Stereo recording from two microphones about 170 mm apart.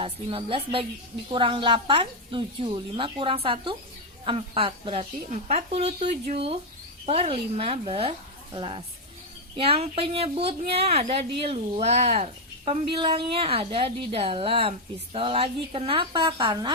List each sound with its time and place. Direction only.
0.0 s speech: 30° right (ahead or behind)